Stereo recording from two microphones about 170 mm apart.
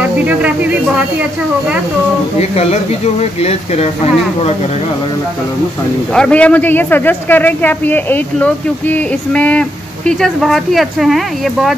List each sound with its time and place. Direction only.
0.0 s speech: 10° right (ahead or behind)
2.5 s speech: 40° left (ahead or behind)
6.1 s a man's voice: 5° left (ahead or behind)